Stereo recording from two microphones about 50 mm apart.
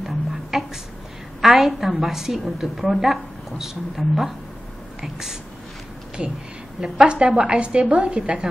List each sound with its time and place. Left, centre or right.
0.0 s music: centre
1.4 s a woman's voice: centre
6.8 s a woman's voice: centre